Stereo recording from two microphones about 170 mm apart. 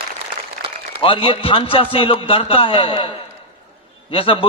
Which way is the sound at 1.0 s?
30° left (ahead or behind).